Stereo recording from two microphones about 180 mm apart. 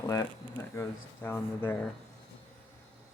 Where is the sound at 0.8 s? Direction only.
10° left (ahead or behind).